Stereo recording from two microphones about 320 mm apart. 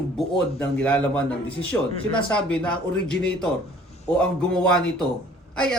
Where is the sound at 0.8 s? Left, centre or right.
Centre.